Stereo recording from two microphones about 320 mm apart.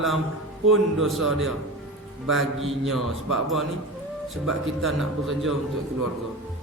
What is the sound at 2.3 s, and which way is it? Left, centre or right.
Speech, right.